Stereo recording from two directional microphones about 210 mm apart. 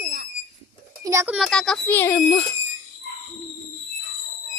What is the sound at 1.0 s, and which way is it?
Speech, 15° right (ahead or behind).